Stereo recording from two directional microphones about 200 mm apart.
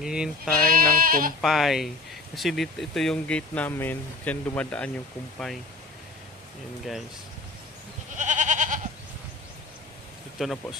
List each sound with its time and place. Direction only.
0.0 s speech: 5° right (ahead or behind)
0.7 s sheep: 45° right (ahead or behind)
1.4 s speech: centre (ahead or behind)
8.2 s goat: 40° right (ahead or behind)
10.4 s speech: centre (ahead or behind)